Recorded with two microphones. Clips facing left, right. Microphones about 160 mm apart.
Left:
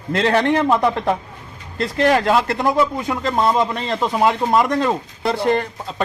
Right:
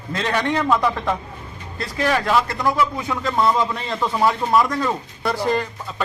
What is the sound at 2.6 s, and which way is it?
A man's voice, 20° left (ahead or behind).